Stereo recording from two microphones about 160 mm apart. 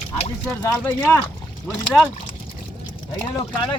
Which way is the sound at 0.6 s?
15° left (ahead or behind).